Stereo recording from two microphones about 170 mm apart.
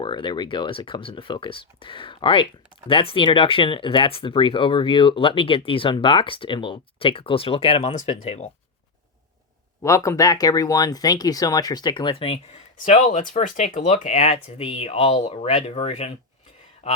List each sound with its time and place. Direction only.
0.0 s speech: 25° left (ahead or behind)
7.9 s speech: 45° left (ahead or behind)
9.8 s speech: 20° left (ahead or behind); by 17.0 s 40° left (ahead or behind)